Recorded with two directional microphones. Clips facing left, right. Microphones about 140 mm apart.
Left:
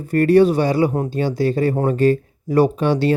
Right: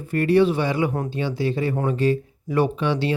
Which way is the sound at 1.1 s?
40° left (ahead or behind).